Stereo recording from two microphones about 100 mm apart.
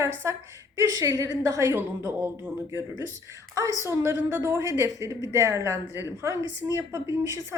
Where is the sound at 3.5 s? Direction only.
30° right (ahead or behind).